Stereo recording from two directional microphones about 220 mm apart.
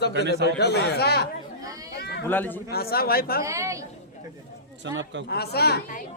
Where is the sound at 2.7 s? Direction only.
45° left (ahead or behind).